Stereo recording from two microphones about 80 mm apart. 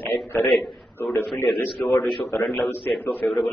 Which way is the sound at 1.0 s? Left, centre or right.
Left.